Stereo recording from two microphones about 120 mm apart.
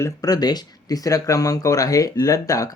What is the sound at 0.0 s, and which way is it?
Speech, 30° left (ahead or behind).